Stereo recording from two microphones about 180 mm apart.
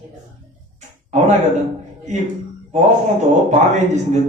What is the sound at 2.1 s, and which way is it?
A man's voice, 40° right (ahead or behind).